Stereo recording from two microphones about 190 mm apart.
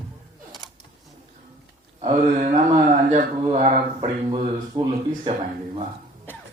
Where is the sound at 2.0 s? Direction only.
40° right (ahead or behind).